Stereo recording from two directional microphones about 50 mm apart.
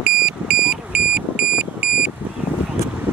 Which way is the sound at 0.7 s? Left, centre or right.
Centre.